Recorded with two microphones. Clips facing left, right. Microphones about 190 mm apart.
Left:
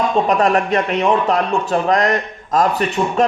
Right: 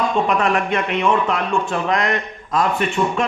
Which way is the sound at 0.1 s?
40° left (ahead or behind).